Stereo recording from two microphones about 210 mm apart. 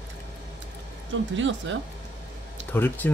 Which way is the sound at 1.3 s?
60° right (ahead or behind).